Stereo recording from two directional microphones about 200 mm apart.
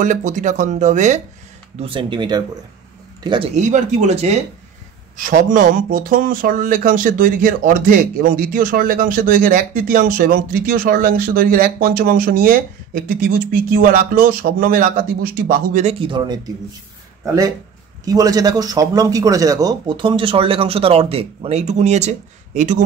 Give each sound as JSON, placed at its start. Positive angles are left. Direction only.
{"t": 0.0, "sound": "speech", "side_deg": -40}
{"t": 1.8, "sound": "speech", "side_deg": -25}
{"t": 18.0, "sound": "speech", "side_deg": -20}